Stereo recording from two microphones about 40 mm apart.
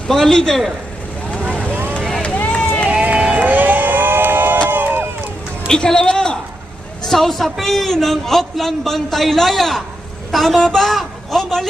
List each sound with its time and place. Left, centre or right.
0.1 s a man's voice: centre
2.0 s vehicle: centre
2.5 s run: left
3.0 s run: right
3.5 s crowd: right
4.7 s run: right
5.6 s a woman's voice: centre
7.1 s a woman's voice: centre